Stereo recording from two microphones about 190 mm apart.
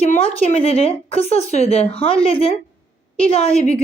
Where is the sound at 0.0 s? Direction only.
35° left (ahead or behind).